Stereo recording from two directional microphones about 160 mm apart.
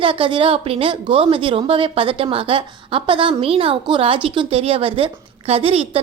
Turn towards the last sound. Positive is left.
turn(degrees=-35)  # may be behind; listen again after turning